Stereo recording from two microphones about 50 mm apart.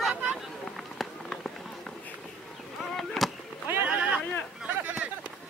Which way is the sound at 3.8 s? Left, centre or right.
Right.